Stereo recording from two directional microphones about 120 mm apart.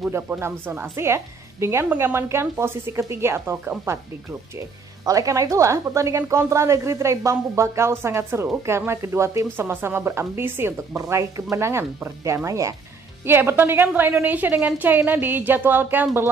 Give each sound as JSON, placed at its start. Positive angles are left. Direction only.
{"t": 0.1, "sound": "a woman's voice", "side_deg": -20}